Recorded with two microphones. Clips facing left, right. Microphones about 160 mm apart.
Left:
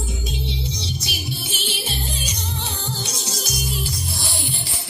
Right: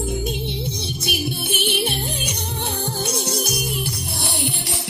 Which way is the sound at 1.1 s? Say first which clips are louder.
Right 6 dB; 60° right (ahead or behind).